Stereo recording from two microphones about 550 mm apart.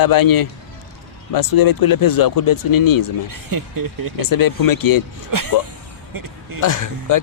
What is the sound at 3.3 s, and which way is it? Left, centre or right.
Speech, right.